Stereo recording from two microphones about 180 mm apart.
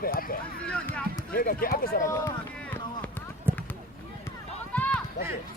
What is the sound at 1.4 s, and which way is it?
Speech, 55° left (ahead or behind).